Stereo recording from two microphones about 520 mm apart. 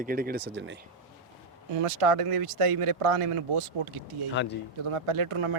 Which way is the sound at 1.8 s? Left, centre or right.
Right.